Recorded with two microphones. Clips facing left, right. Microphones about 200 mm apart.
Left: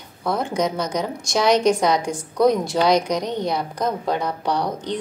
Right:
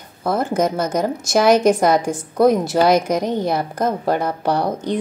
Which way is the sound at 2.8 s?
5° right (ahead or behind).